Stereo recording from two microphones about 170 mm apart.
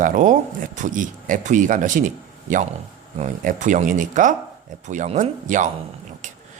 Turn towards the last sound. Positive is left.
turn(degrees=-45)  # may be behind; listen again after turning